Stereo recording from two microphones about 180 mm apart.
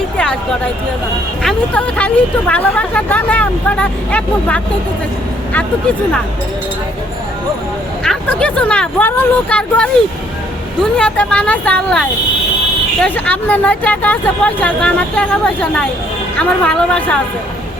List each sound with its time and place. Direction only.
1.4 s speech: 5° left (ahead or behind)
8.0 s speech: 5° left (ahead or behind)
10.9 s speech: 5° left (ahead or behind)